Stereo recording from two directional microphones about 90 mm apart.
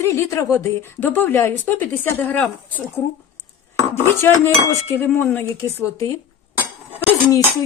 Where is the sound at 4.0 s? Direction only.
25° left (ahead or behind).